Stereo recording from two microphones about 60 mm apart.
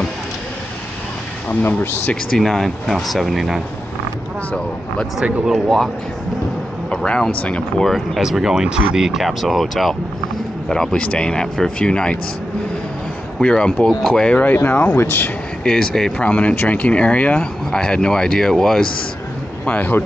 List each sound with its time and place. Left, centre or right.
1.5 s speech: left
2.3 s speech: centre
5.2 s speech: right
5.5 s speech: centre
7.0 s speech: centre
7.8 s speech: centre
10.7 s speech: centre
13.4 s speech: centre
14.3 s speech: left
15.6 s speech: centre
16.2 s speech: left
19.6 s speech: left